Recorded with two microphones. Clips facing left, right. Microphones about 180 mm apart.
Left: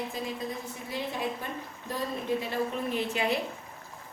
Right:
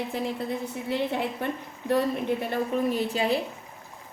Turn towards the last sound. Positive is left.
turn(degrees=-35)  # may be behind; listen again after turning